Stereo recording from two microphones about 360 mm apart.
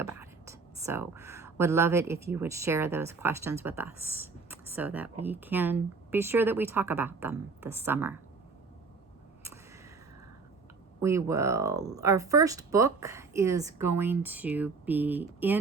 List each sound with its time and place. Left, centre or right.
0.0 s speech: centre
11.0 s speech: centre